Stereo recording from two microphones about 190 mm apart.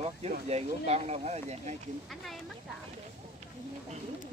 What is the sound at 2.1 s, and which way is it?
Speech, centre (ahead or behind).